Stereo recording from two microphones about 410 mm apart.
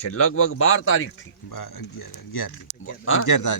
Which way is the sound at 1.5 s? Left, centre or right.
Left.